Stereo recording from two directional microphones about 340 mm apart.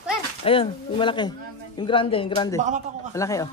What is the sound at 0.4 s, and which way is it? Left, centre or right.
Speech, centre.